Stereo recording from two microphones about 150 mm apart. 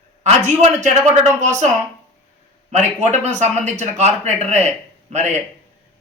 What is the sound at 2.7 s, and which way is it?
Speech, 50° right (ahead or behind).